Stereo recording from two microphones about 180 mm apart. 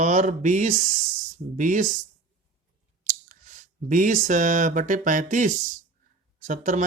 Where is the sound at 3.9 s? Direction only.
45° right (ahead or behind).